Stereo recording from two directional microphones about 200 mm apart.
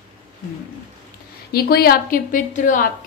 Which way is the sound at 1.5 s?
50° left (ahead or behind).